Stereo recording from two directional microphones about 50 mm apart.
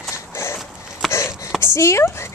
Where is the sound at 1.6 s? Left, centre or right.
Left.